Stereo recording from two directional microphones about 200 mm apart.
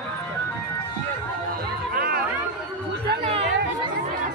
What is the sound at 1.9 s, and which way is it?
Music, 50° right (ahead or behind).